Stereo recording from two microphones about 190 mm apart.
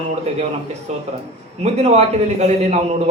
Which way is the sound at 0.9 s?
35° right (ahead or behind).